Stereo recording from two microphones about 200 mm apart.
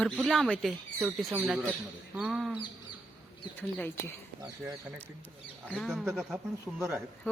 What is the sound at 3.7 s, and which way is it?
Speech, 5° left (ahead or behind).